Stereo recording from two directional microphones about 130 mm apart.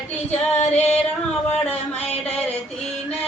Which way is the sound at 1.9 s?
55° left (ahead or behind).